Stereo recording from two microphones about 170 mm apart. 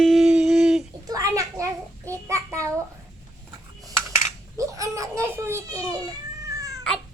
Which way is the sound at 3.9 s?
20° right (ahead or behind).